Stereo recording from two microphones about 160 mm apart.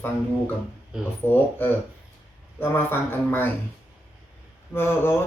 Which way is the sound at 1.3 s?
10° left (ahead or behind).